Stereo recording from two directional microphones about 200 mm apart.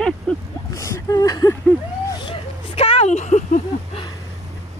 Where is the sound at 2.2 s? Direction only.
30° left (ahead or behind).